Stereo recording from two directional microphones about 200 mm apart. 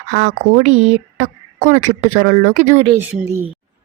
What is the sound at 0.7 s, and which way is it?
Speech, 30° right (ahead or behind).